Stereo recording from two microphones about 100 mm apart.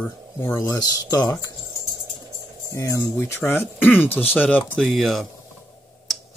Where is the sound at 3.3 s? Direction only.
20° left (ahead or behind).